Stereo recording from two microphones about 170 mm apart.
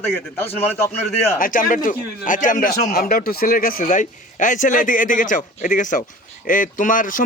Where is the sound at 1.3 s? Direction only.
55° left (ahead or behind).